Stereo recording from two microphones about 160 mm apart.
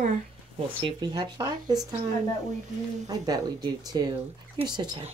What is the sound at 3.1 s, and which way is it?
Speech, 25° right (ahead or behind).